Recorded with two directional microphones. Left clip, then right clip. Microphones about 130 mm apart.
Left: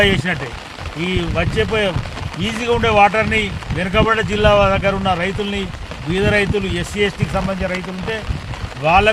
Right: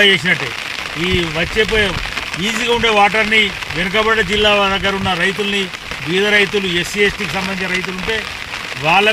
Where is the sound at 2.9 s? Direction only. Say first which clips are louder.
Even; 25° left (ahead or behind).